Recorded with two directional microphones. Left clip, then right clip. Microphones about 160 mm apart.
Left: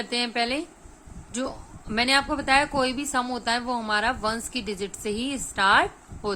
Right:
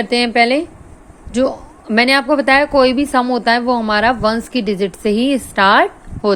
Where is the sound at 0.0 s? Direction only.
30° right (ahead or behind).